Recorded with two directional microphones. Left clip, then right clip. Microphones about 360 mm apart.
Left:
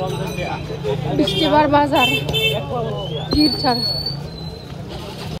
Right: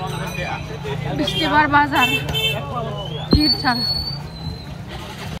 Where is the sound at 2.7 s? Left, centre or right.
Left.